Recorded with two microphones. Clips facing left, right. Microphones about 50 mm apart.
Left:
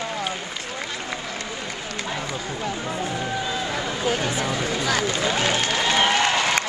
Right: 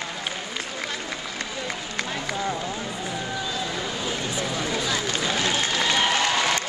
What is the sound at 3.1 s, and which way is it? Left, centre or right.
Run, centre.